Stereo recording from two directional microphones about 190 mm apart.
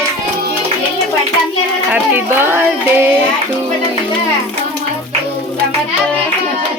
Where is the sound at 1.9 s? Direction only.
10° right (ahead or behind).